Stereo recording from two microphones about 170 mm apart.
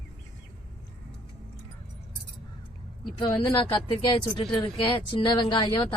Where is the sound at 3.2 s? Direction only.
25° left (ahead or behind).